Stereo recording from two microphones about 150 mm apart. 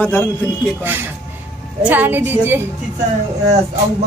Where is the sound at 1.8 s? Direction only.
10° right (ahead or behind).